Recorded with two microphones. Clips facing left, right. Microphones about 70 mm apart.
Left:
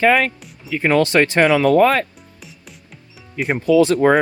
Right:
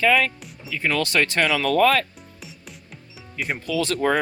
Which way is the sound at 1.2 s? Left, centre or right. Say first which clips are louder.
Left 7 dB; left.